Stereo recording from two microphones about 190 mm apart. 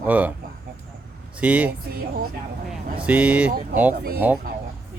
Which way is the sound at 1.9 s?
55° right (ahead or behind).